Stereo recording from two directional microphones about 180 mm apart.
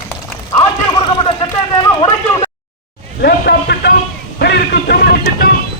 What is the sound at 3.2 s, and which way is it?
Vehicle, 65° left (ahead or behind).